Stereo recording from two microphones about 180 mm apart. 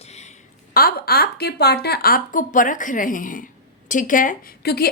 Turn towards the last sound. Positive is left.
turn(degrees=60)  # may be behind; listen again after turning